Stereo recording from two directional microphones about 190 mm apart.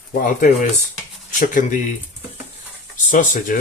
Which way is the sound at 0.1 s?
45° left (ahead or behind).